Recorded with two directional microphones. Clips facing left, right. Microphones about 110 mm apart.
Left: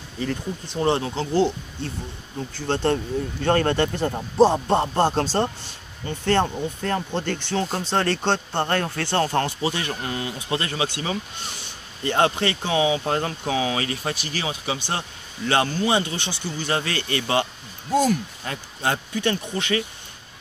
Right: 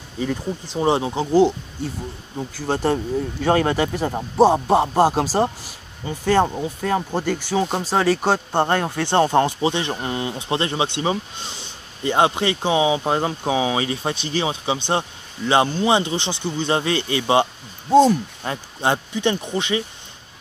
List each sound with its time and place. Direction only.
0.2 s a man's voice: 10° right (ahead or behind)
8.5 s speech: 20° right (ahead or behind)